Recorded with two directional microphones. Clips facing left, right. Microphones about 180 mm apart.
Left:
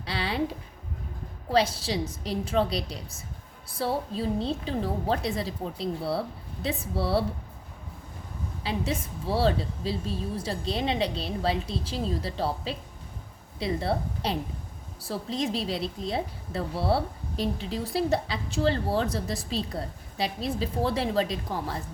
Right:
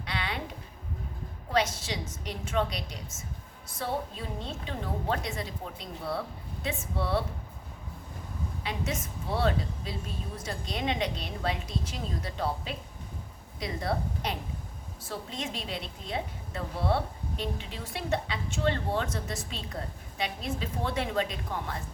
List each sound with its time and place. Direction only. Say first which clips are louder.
0.0 s a sound: left 6 dB; 30° left (ahead or behind)
1.5 s a woman's voice: left 4 dB; 30° left (ahead or behind)
8.6 s a woman's voice: left 5 dB; 30° left (ahead or behind)